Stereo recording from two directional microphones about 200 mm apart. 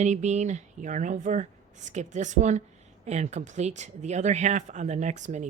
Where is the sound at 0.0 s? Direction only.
35° right (ahead or behind).